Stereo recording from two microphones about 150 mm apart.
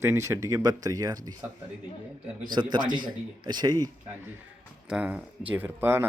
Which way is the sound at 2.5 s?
30° right (ahead or behind).